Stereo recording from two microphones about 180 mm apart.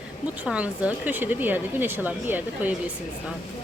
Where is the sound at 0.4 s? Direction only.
5° right (ahead or behind).